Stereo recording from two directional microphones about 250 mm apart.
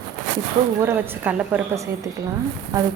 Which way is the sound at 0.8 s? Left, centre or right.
Centre.